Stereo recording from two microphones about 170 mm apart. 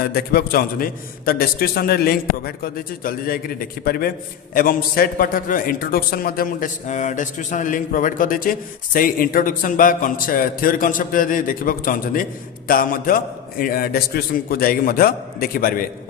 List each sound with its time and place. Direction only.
0.0 s a man's voice: 65° left (ahead or behind)